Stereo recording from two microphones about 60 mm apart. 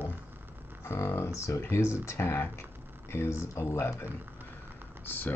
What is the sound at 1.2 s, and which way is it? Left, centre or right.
Speech, left.